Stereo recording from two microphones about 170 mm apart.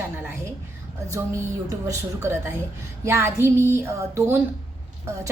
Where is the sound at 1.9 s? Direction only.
15° right (ahead or behind).